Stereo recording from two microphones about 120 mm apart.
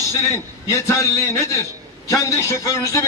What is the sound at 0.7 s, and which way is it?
Speech, 25° left (ahead or behind).